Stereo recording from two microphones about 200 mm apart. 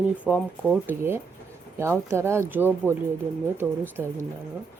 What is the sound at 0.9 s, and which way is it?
Speech, 10° right (ahead or behind).